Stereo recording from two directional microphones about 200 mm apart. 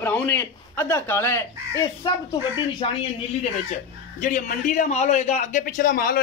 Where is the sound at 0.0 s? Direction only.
10° left (ahead or behind).